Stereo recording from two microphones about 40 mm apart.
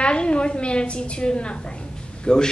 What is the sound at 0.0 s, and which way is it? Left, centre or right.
A woman's voice, left.